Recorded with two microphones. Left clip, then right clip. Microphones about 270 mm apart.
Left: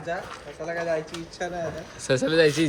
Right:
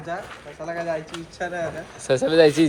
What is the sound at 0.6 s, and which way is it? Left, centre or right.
Speech, right.